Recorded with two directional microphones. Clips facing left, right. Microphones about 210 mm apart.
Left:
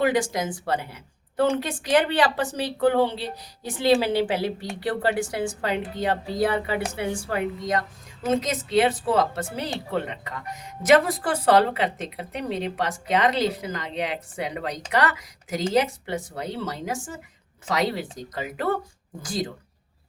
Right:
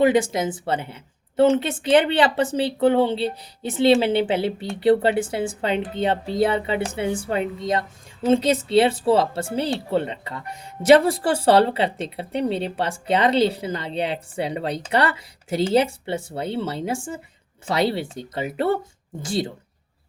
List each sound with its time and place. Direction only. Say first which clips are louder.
0.0 s speech: right 5 dB; 20° right (ahead or behind)